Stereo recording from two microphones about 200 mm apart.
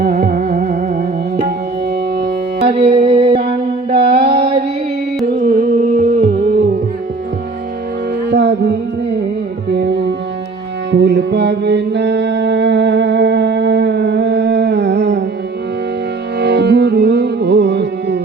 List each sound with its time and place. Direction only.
0.0 s music: 50° right (ahead or behind)
2.6 s music: 30° right (ahead or behind)
5.4 s music: 35° right (ahead or behind)
8.3 s music: 60° right (ahead or behind)
16.4 s music: 55° right (ahead or behind)